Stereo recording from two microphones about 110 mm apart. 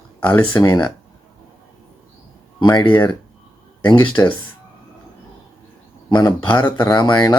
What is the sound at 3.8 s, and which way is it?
Speech, 45° left (ahead or behind).